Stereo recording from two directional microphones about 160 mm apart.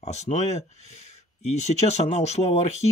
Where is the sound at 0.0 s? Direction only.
45° left (ahead or behind).